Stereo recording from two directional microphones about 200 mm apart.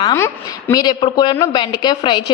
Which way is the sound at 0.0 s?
15° left (ahead or behind).